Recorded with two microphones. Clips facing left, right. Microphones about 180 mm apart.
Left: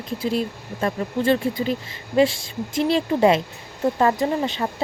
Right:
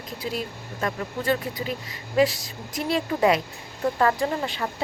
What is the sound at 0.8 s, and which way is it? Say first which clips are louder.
Speech: left 5 dB; 30° left (ahead or behind).